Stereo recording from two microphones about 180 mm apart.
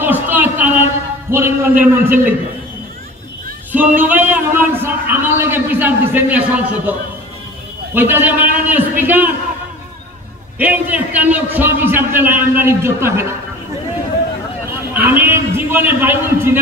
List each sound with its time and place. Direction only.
0.0 s a sound: 10° right (ahead or behind)
1.3 s a man's voice: 15° right (ahead or behind)
3.7 s a man's voice: 10° right (ahead or behind)
10.6 s a man's voice: 10° right (ahead or behind)
15.0 s a man's voice: 10° right (ahead or behind)